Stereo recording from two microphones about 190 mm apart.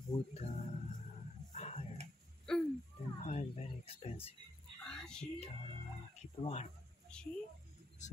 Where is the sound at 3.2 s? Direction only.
35° left (ahead or behind).